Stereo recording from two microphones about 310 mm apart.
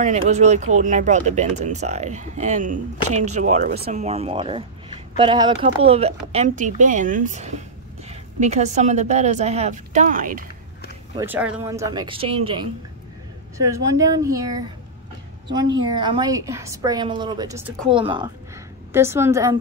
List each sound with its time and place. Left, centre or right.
0.0 s speech: right
11.1 s a woman's voice: centre
14.1 s a woman's voice: centre
15.4 s a woman's voice: right
15.9 s a woman's voice: centre